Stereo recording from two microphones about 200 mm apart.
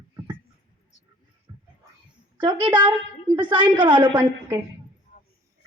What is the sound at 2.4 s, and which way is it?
A woman's voice, 25° right (ahead or behind).